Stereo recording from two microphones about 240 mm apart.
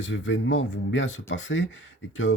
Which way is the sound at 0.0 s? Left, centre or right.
Left.